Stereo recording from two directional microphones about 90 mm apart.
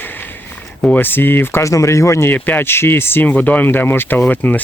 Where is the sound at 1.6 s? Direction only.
35° left (ahead or behind).